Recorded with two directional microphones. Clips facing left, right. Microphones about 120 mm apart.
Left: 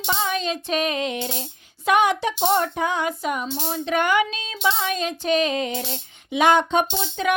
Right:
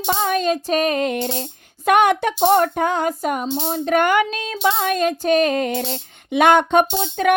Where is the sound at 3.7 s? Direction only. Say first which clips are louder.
Right 4 dB; 50° right (ahead or behind).